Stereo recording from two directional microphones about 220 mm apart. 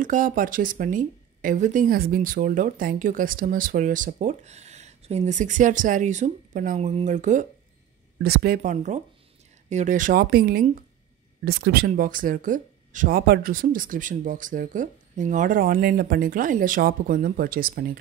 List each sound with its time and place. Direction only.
0.0 s speech: 35° right (ahead or behind)
8.2 s speech: 45° right (ahead or behind)